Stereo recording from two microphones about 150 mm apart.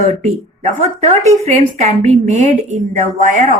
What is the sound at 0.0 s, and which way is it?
Speech, 55° right (ahead or behind).